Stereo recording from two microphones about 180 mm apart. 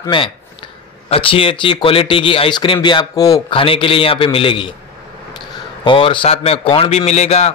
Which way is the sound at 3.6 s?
30° left (ahead or behind).